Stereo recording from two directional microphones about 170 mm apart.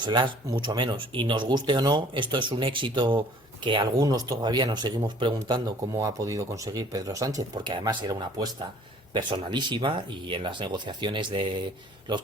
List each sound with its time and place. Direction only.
0.0 s speech: 25° right (ahead or behind)